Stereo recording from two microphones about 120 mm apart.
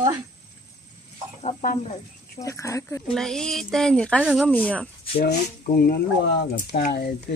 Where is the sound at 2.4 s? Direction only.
25° left (ahead or behind).